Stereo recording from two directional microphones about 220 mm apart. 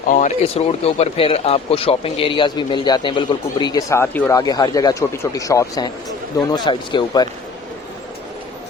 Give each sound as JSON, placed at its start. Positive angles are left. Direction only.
{"t": 0.1, "sound": "speech", "side_deg": 30}